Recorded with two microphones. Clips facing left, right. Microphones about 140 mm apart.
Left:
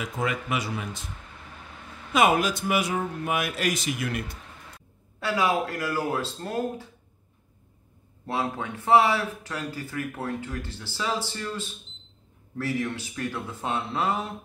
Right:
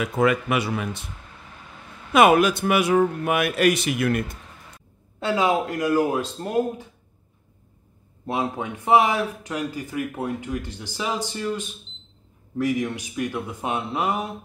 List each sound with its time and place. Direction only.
0.0 s speech: 65° right (ahead or behind)
2.1 s speech: 65° right (ahead or behind)
5.2 s speech: 20° right (ahead or behind)
8.3 s speech: 20° right (ahead or behind)